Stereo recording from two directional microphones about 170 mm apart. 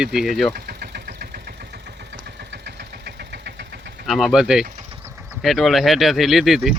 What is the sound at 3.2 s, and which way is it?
Engine, 85° right.